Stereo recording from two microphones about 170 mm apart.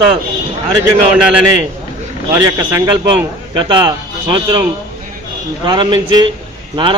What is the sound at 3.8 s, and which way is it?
Speech, 25° right (ahead or behind).